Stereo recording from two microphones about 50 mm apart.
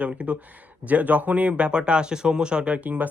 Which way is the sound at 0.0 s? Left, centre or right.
Right.